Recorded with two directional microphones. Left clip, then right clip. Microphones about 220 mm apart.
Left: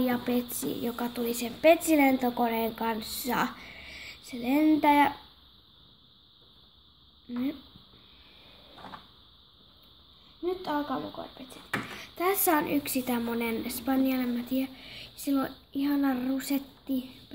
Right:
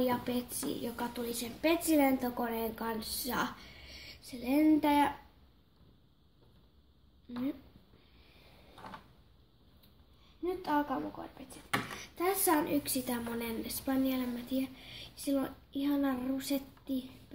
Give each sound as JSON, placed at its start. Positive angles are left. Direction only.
{"t": 0.0, "sound": "a woman's voice", "side_deg": 45}
{"t": 10.4, "sound": "a woman's voice", "side_deg": 35}